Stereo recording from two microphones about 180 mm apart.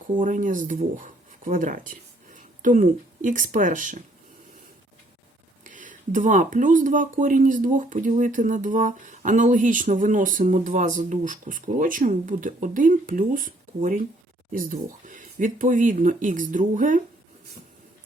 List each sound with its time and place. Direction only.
0.2 s speech: 45° right (ahead or behind)
5.6 s speech: 45° right (ahead or behind)